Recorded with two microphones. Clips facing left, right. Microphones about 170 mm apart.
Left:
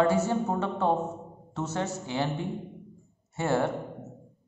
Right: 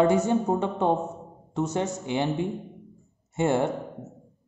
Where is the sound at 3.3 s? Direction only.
20° right (ahead or behind).